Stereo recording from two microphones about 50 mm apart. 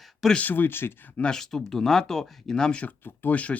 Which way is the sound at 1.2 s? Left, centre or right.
Centre.